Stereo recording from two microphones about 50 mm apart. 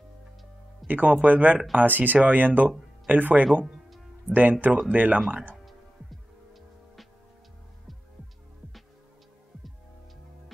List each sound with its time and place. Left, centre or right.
0.8 s speech: right